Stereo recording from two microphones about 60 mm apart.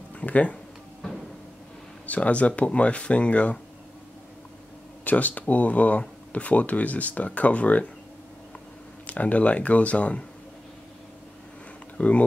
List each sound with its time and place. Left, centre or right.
0.2 s speech: left
2.0 s speech: left
5.0 s speech: left
9.0 s speech: left
12.0 s speech: left